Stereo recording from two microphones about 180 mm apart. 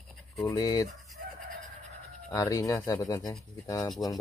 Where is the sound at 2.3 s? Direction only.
20° left (ahead or behind).